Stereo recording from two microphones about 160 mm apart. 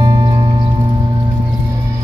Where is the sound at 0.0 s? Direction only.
20° right (ahead or behind).